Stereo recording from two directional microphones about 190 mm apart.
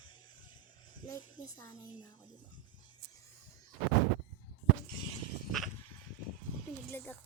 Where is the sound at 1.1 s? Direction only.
15° left (ahead or behind).